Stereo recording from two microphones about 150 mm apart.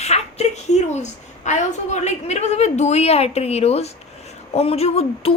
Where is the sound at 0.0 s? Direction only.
45° left (ahead or behind).